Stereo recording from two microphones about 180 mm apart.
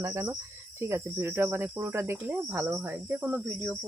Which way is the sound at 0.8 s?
15° right (ahead or behind).